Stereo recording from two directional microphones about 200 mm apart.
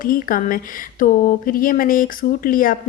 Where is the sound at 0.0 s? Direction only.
45° left (ahead or behind).